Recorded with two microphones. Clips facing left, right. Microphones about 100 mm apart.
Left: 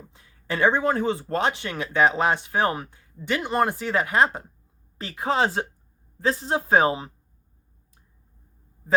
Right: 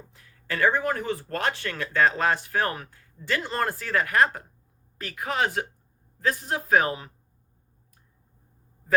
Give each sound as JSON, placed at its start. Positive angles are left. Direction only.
{"t": 0.1, "sound": "speech", "side_deg": 25}